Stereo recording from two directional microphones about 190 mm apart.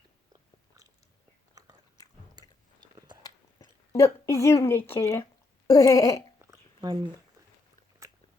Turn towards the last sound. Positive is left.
turn(degrees=-25)  # may be behind; listen again after turning